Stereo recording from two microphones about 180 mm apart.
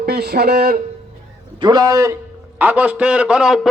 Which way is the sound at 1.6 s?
20° right (ahead or behind).